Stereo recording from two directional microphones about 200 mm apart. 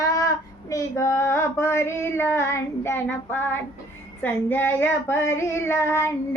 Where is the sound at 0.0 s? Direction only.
15° left (ahead or behind).